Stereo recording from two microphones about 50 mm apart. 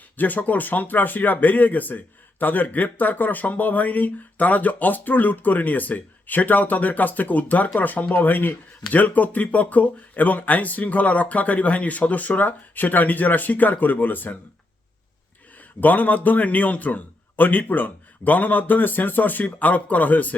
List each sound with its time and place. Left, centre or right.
0.2 s speech: left
15.5 s speech: left